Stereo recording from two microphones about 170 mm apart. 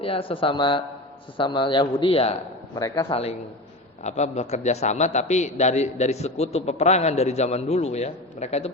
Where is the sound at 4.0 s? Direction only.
40° left (ahead or behind).